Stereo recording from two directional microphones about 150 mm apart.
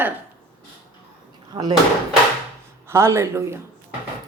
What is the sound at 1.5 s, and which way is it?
Speech, 35° right (ahead or behind).